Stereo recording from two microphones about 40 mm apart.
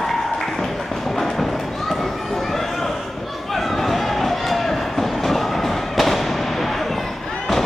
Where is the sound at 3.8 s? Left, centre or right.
Centre.